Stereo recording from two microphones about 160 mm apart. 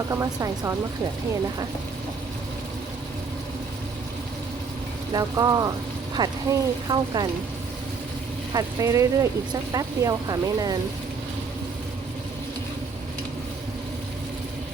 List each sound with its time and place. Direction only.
0.1 s speech: 20° right (ahead or behind)
5.1 s speech: 25° right (ahead or behind)
8.5 s speech: 20° right (ahead or behind)